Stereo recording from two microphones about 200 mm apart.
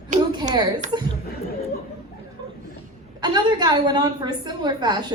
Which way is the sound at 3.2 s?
20° right (ahead or behind).